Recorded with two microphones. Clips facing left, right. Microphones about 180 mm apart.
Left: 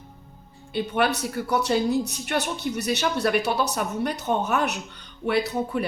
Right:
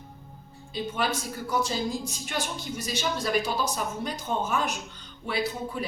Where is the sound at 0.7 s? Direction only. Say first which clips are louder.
Left 5 dB; 65° left (ahead or behind).